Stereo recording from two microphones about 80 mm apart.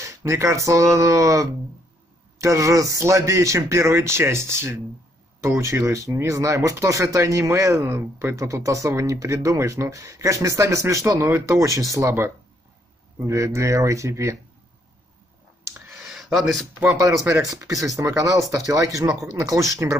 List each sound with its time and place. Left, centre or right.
0.0 s speech: right
15.7 s a sound: right
16.0 s speech: centre
17.3 s speech: right